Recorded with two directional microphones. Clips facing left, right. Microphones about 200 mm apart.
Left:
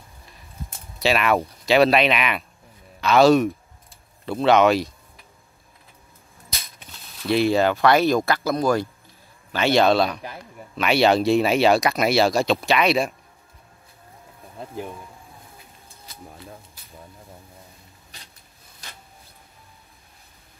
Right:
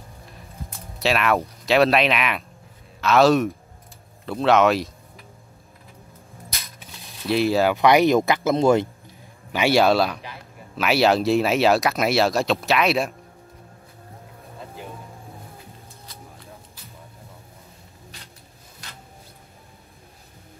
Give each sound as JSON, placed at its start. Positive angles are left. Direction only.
{"t": 0.9, "sound": "speech", "side_deg": 0}
{"t": 7.2, "sound": "speech", "side_deg": 0}
{"t": 7.7, "sound": "speech", "side_deg": -15}
{"t": 9.5, "sound": "speech", "side_deg": -10}